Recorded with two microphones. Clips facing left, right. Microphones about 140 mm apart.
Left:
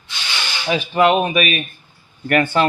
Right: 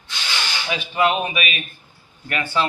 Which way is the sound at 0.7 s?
45° left (ahead or behind).